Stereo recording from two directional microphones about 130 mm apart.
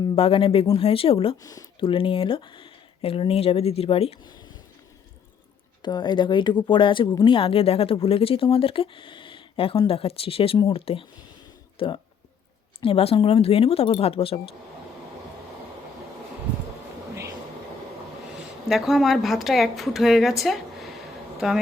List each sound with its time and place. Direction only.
0.2 s speech: 45° left (ahead or behind)
1.4 s speech: 30° left (ahead or behind)
1.8 s speech: 45° left (ahead or behind)
5.8 s speech: 35° left (ahead or behind)
18.7 s a woman's voice: centre (ahead or behind)